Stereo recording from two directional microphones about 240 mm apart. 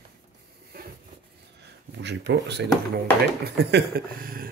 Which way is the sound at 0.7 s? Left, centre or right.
Right.